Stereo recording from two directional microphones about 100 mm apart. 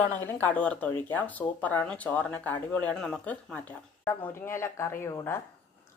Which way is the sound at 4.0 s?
25° left (ahead or behind).